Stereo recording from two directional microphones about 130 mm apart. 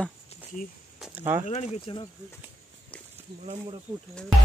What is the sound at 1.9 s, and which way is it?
Speech, 45° left (ahead or behind).